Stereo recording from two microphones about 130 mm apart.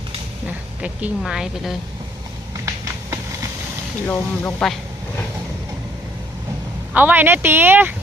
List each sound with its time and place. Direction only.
0.8 s a woman's voice: 5° right (ahead or behind)
4.0 s speech: 20° left (ahead or behind)
6.9 s speech: 15° right (ahead or behind)